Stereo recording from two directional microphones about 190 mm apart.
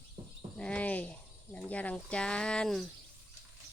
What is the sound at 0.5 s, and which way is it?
Speech, 5° left (ahead or behind).